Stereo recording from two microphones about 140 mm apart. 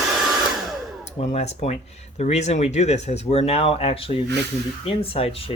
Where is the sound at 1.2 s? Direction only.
50° left (ahead or behind).